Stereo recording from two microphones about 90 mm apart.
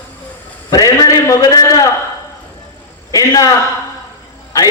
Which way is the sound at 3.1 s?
40° left (ahead or behind).